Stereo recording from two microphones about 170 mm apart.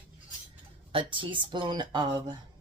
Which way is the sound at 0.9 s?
30° right (ahead or behind).